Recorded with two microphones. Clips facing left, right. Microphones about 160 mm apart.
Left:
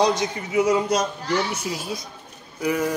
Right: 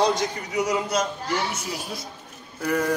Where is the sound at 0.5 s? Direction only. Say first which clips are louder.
Left 5 dB; 30° left (ahead or behind).